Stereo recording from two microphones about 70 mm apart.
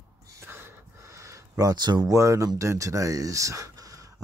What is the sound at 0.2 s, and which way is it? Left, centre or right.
Gasp, right.